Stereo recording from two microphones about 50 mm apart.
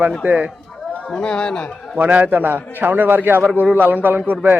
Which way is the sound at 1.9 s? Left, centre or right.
Right.